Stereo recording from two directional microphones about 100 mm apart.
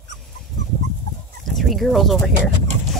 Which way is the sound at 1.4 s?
Centre (ahead or behind).